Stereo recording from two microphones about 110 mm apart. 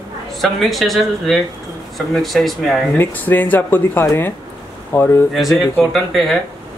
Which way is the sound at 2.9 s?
15° left (ahead or behind).